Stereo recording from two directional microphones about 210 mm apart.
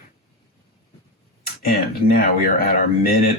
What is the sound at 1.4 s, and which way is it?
Speech, 45° left (ahead or behind).